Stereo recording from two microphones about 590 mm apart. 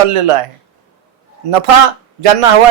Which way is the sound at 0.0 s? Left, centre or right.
Right.